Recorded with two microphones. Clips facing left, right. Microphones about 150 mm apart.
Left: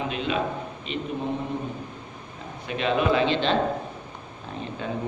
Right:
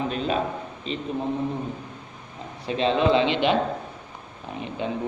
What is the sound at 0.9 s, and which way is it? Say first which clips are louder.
Speech: right 1 dB; 35° right (ahead or behind).